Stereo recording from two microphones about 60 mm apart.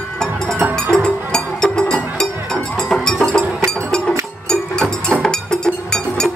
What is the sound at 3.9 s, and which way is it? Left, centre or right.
Music, centre.